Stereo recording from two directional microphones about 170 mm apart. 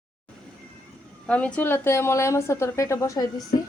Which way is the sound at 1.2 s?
5° left (ahead or behind).